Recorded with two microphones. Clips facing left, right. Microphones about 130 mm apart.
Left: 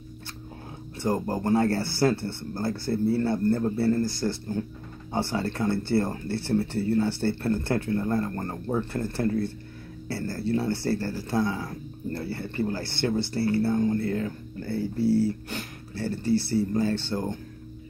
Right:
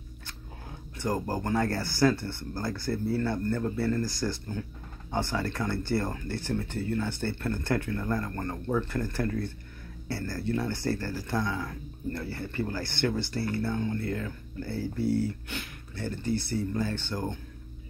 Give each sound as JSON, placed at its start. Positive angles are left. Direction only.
{"t": 0.9, "sound": "speech", "side_deg": 25}